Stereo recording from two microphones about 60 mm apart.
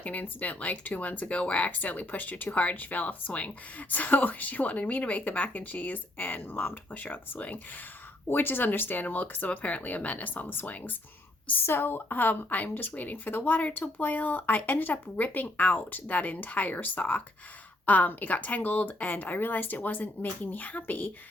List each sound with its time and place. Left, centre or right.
0.0 s a woman's voice: left